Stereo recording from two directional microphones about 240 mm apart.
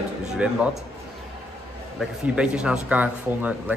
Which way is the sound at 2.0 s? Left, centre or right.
Centre.